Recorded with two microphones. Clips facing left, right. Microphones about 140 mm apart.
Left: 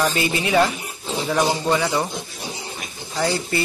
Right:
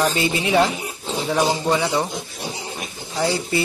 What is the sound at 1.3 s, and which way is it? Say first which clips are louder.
Speech: even; 10° right (ahead or behind).